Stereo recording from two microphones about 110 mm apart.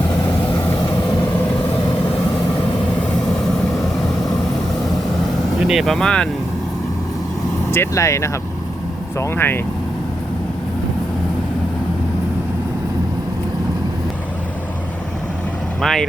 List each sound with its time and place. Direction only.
5.6 s speech: centre (ahead or behind)
7.7 s speech: 25° left (ahead or behind)
15.8 s speech: 5° left (ahead or behind)